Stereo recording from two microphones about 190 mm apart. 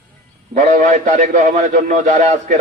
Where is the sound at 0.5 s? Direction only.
40° right (ahead or behind).